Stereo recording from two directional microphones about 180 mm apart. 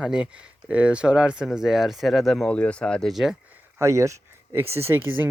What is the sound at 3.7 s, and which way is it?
Speech, 15° right (ahead or behind).